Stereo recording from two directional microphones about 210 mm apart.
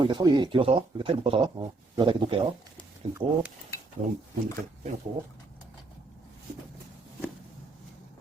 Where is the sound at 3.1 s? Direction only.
10° right (ahead or behind).